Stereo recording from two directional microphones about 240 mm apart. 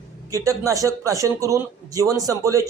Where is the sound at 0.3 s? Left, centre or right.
Centre.